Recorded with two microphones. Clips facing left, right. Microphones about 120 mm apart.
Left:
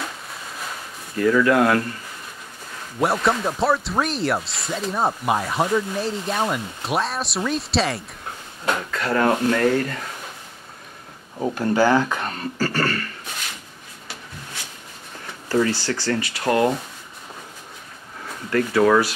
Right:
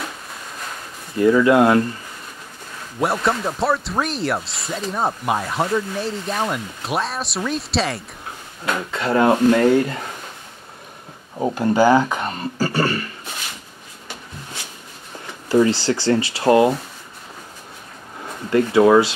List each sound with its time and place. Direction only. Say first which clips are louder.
1.1 s speech: right 3 dB; 20° right (ahead or behind)
3.0 s speech: even; centre (ahead or behind)
8.9 s speech: right 4 dB; 25° right (ahead or behind)
11.3 s speech: right 3 dB; 20° right (ahead or behind)
15.4 s a sound: right 5 dB; 15° right (ahead or behind)
15.7 s speech: right 5 dB; 25° right (ahead or behind)
18.5 s speech: right 4 dB; 20° right (ahead or behind)